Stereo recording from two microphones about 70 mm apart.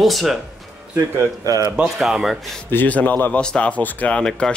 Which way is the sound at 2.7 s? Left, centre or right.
Left.